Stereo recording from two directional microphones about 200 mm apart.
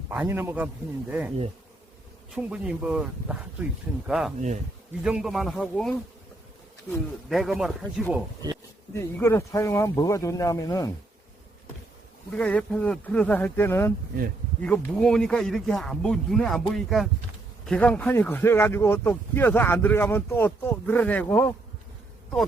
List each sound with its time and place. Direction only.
0.1 s a man's voice: 10° right (ahead or behind)
2.3 s a man's voice: 5° right (ahead or behind)
4.4 s speech: 35° right (ahead or behind)
5.0 s a man's voice: 5° right (ahead or behind)
7.3 s a man's voice: centre (ahead or behind)
9.0 s speech: 15° left (ahead or behind)
12.4 s a man's voice: 5° left (ahead or behind)